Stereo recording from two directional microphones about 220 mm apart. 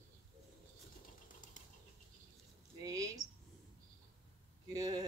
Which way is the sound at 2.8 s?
15° right (ahead or behind).